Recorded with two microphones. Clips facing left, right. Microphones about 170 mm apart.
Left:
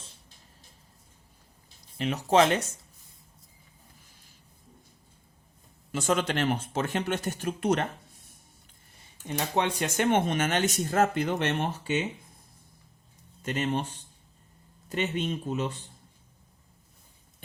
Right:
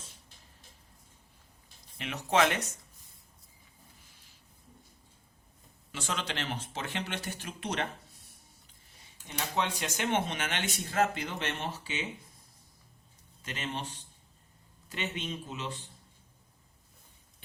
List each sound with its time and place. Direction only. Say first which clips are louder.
2.0 s speech: left 5 dB; 35° left (ahead or behind)
5.9 s speech: left 10 dB; 45° left (ahead or behind)
9.2 s speech: left 5 dB; 55° left (ahead or behind)
13.4 s speech: left 9 dB; 50° left (ahead or behind)